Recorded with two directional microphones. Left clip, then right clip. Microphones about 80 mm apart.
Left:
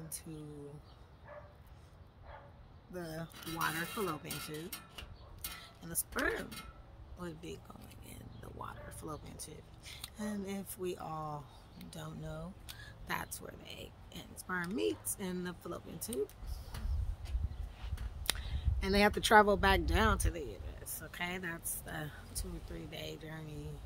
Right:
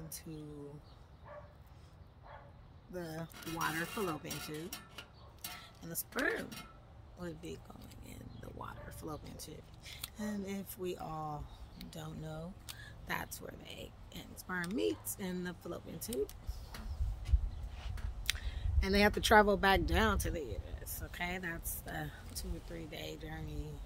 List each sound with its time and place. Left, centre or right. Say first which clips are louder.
2.9 s speech: even; centre
5.6 s speech: left 1 dB; centre
12.8 s speech: even; centre
18.2 s speech: even; centre